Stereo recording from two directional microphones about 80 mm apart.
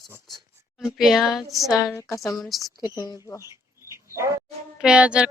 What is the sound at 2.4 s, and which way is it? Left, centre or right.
Speech, centre.